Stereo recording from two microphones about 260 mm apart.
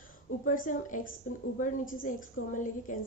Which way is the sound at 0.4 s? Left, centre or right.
Left.